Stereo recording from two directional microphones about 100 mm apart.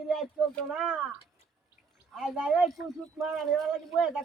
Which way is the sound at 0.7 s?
5° right (ahead or behind).